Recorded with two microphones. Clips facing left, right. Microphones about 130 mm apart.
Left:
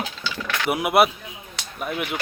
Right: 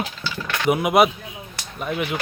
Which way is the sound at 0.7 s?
5° left (ahead or behind).